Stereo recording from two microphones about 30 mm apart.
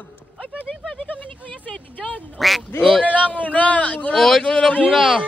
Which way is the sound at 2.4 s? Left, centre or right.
Centre.